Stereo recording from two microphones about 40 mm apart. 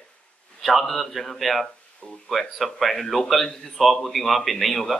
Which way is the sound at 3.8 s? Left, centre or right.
Centre.